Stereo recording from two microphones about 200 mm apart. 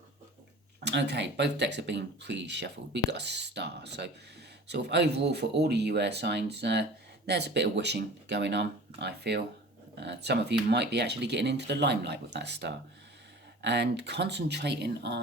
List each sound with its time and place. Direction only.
0.8 s speech: 60° right (ahead or behind)